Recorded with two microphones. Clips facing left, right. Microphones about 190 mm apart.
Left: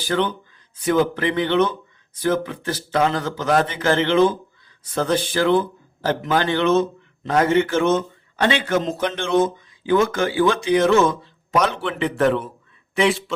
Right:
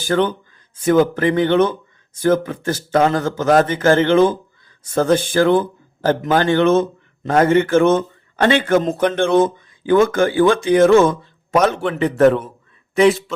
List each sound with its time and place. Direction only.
0.0 s a man's voice: 45° right (ahead or behind)